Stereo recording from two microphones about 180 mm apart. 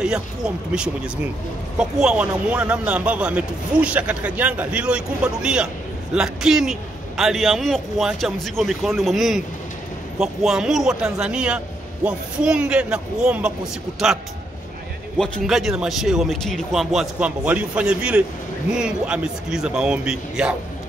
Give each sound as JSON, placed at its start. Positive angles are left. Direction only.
{"t": 0.0, "sound": "a man's voice", "side_deg": -5}
{"t": 15.1, "sound": "a man's voice", "side_deg": 5}